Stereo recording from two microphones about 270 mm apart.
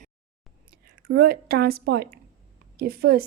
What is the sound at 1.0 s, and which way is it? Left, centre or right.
Speech, right.